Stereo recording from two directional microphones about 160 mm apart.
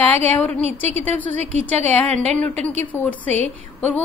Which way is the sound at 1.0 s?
10° left (ahead or behind).